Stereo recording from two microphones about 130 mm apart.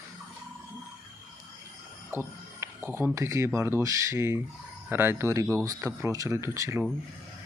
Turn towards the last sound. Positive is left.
turn(degrees=-20)  # may be behind; listen again after turning